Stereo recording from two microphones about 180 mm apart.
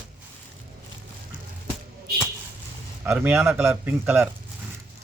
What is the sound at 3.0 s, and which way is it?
Speech, 10° right (ahead or behind).